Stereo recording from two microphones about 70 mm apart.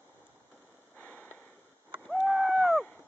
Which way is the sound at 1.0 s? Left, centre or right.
Left.